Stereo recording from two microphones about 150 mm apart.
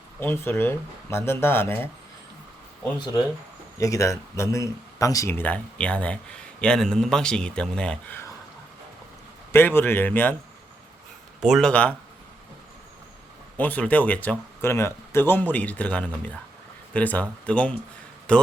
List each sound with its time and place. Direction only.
0.2 s speech: 15° left (ahead or behind)
3.0 s speech: 25° left (ahead or behind); by 8.2 s 5° left (ahead or behind)
9.5 s speech: 15° left (ahead or behind)
11.3 s speech: 5° right (ahead or behind)
11.7 s speech: 10° left (ahead or behind)
13.6 s speech: 10° left (ahead or behind)